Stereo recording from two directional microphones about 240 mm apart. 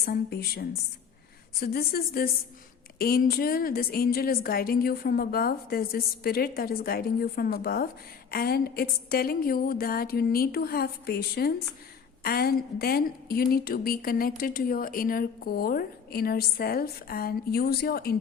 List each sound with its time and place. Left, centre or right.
0.0 s a woman's voice: left